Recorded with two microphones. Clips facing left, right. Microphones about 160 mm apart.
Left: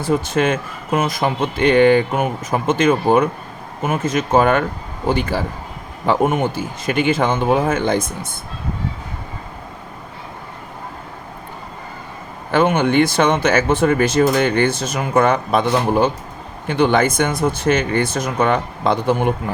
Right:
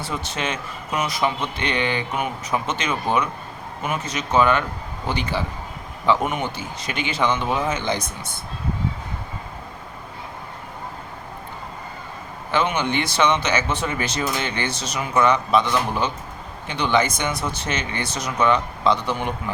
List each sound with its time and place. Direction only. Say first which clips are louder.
0.0 s speech: left 10 dB; 50° left (ahead or behind)
12.5 s speech: left 7 dB; 50° left (ahead or behind)